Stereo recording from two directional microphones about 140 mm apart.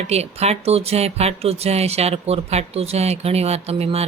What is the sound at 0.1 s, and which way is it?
Speech, 50° right (ahead or behind).